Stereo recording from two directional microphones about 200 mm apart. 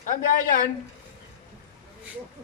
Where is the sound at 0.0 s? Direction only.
40° left (ahead or behind).